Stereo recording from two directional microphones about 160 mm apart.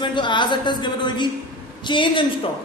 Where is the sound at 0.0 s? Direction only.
30° left (ahead or behind).